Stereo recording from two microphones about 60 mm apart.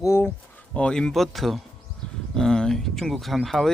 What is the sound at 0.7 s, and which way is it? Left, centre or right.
Speech, centre.